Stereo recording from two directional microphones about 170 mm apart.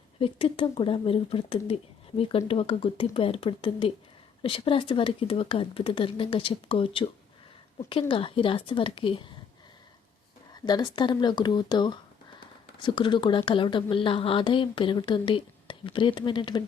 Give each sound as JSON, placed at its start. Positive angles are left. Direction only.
{"t": 0.2, "sound": "speech", "side_deg": 30}
{"t": 10.5, "sound": "speech", "side_deg": 25}